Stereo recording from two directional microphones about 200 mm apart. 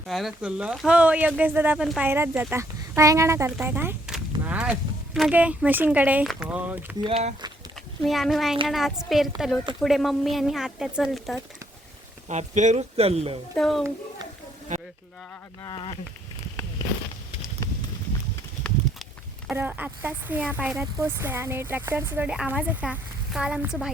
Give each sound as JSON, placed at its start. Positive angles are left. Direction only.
{"t": 0.1, "sound": "speech", "side_deg": 0}
{"t": 7.0, "sound": "speech", "side_deg": -30}
{"t": 8.0, "sound": "a woman's voice", "side_deg": 0}
{"t": 12.3, "sound": "speech", "side_deg": -35}
{"t": 13.6, "sound": "a woman's voice", "side_deg": 0}
{"t": 14.7, "sound": "sizzle", "side_deg": -35}
{"t": 15.6, "sound": "speech", "side_deg": 25}
{"t": 19.5, "sound": "speech", "side_deg": -10}